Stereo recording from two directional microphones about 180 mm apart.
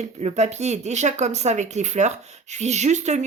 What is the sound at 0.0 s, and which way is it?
Speech, 40° right (ahead or behind).